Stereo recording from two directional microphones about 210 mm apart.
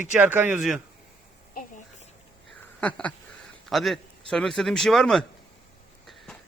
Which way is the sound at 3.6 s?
Centre (ahead or behind).